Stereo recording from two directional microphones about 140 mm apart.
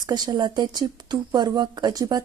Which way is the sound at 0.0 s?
30° right (ahead or behind).